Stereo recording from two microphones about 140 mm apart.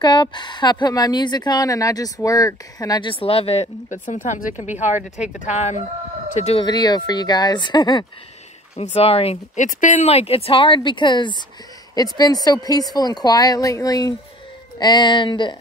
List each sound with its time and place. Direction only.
0.0 s speech: 30° left (ahead or behind)
3.9 s speech: 65° left (ahead or behind)
6.5 s speech: 30° left (ahead or behind)
8.7 s speech: 45° left (ahead or behind)
9.8 s speech: 60° left (ahead or behind); by 15.5 s 35° left (ahead or behind)